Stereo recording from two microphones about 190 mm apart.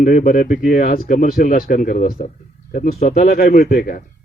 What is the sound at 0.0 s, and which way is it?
Speech, 45° left (ahead or behind).